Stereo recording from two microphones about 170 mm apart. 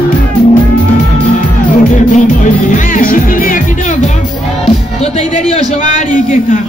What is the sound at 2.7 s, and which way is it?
Music, 55° left (ahead or behind).